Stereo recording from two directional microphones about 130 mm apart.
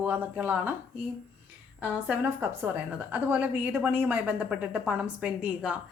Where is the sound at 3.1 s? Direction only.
15° right (ahead or behind).